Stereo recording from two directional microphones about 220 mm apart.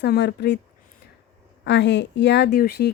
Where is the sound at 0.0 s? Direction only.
50° left (ahead or behind).